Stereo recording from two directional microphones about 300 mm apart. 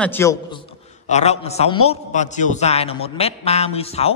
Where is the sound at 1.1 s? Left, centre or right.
Left.